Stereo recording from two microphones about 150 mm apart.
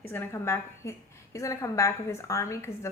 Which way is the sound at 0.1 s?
15° left (ahead or behind).